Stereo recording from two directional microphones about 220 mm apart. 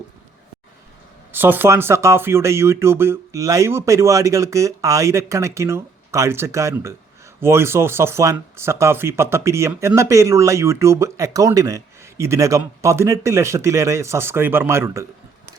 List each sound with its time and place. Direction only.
1.3 s speech: 10° right (ahead or behind)